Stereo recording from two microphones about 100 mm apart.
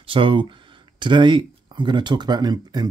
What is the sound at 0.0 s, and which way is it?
Speech, 60° right (ahead or behind).